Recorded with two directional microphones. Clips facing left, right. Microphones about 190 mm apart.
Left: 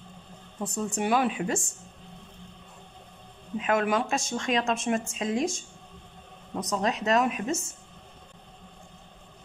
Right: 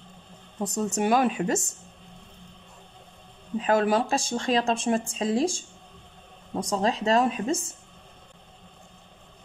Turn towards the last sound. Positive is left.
turn(degrees=-30)  # may be behind; listen again after turning